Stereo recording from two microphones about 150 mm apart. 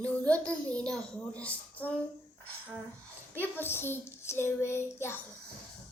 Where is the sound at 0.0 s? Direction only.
10° left (ahead or behind).